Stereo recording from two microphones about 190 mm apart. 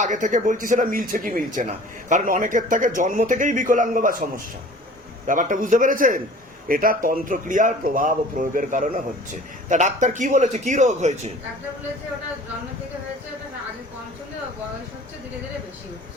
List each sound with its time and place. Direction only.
0.0 s a man's voice: 40° right (ahead or behind)